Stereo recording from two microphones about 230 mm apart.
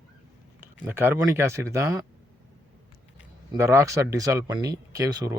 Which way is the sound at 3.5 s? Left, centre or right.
Centre.